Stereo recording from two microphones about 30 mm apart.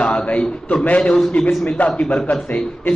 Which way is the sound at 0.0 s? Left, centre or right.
Left.